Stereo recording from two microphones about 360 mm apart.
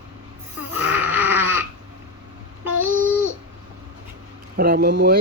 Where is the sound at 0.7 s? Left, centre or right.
Centre.